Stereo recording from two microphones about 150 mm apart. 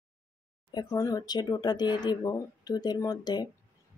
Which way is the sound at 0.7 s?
25° left (ahead or behind).